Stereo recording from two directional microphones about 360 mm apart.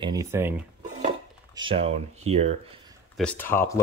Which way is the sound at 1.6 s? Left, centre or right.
Centre.